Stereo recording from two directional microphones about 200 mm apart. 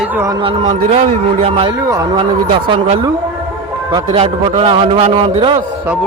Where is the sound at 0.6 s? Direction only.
35° right (ahead or behind).